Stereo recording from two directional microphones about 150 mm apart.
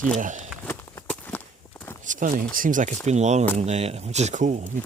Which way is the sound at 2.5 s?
65° right (ahead or behind).